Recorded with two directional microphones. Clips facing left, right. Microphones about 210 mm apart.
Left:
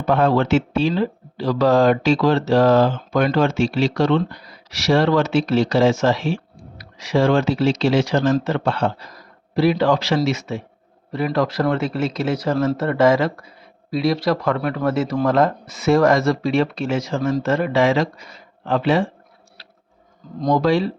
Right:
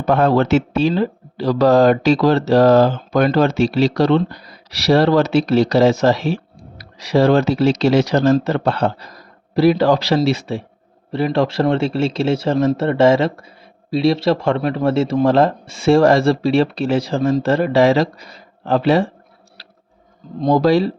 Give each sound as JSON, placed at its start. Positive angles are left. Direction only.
{"t": 0.0, "sound": "a man's voice", "side_deg": -40}
{"t": 19.6, "sound": "tick-tock", "side_deg": -35}
{"t": 20.4, "sound": "speech", "side_deg": -35}